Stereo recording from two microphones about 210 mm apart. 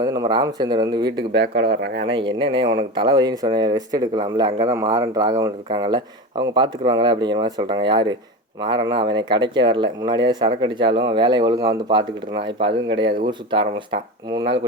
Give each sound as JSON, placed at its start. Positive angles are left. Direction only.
{"t": 0.0, "sound": "speech", "side_deg": -20}
{"t": 1.3, "sound": "speech", "side_deg": -60}
{"t": 2.0, "sound": "speech", "side_deg": -25}